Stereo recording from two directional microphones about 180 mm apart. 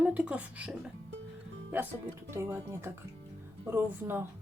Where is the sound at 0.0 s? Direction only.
5° right (ahead or behind).